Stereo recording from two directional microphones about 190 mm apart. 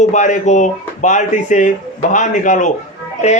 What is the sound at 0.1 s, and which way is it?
Speech, 40° left (ahead or behind).